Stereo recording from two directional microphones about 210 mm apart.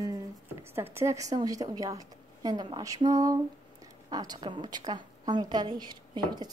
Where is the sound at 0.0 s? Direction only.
15° right (ahead or behind).